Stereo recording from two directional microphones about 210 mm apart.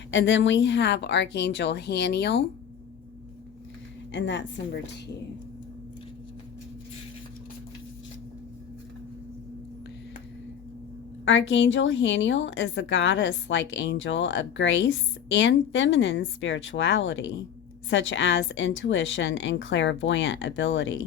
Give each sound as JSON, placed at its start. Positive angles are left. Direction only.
{"t": 0.1, "sound": "a woman's voice", "side_deg": 60}
{"t": 4.1, "sound": "a woman's voice", "side_deg": 60}
{"t": 11.3, "sound": "a woman's voice", "side_deg": 65}